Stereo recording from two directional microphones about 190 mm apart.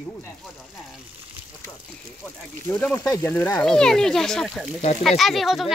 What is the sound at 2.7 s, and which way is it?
Speech, 5° left (ahead or behind).